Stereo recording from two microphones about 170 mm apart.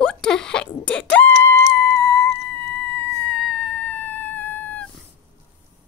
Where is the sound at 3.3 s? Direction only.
5° left (ahead or behind).